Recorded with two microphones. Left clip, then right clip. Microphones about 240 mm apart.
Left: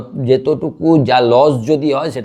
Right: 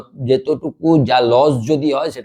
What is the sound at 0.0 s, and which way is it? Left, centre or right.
A man's voice, right.